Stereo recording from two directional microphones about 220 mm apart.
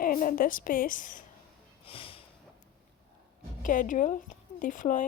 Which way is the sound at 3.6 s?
35° left (ahead or behind).